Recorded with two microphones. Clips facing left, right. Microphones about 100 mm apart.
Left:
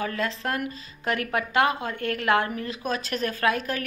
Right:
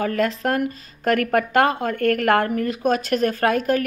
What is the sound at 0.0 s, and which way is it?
Speech, 50° right (ahead or behind).